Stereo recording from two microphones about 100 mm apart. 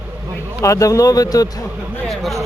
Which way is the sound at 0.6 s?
35° left (ahead or behind).